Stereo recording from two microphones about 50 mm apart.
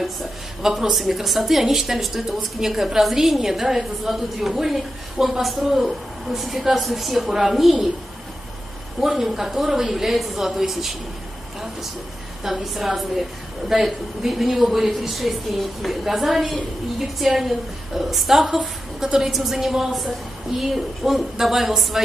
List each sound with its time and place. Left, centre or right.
0.0 s a woman's voice: centre
9.0 s speech: centre
12.4 s a woman's voice: centre